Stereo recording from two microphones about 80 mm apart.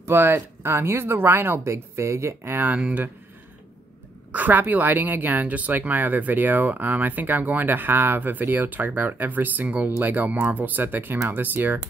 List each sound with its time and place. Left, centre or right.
0.0 s speech: right
4.3 s speech: right